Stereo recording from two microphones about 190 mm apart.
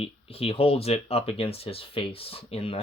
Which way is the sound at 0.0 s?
30° left (ahead or behind).